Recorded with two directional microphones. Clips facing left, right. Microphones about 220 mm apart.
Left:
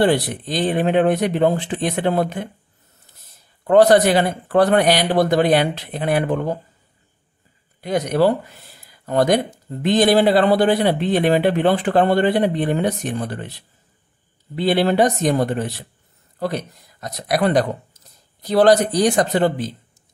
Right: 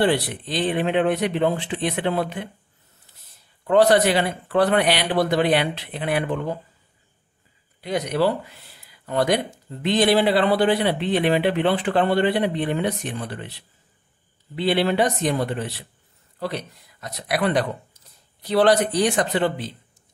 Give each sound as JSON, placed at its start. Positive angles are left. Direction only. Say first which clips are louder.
{"t": 0.0, "sound": "a man's voice", "louder": "left 3 dB", "side_deg": 45}
{"t": 3.6, "sound": "a man's voice", "louder": "left 4 dB", "side_deg": 45}
{"t": 7.8, "sound": "a man's voice", "louder": "left 4 dB", "side_deg": 45}